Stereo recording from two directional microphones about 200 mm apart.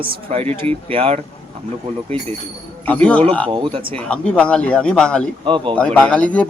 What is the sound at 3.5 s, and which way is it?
Speech, 25° right (ahead or behind).